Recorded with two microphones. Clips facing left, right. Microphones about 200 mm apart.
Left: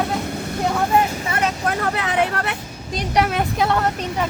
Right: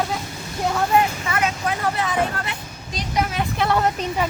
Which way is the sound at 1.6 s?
70° left (ahead or behind).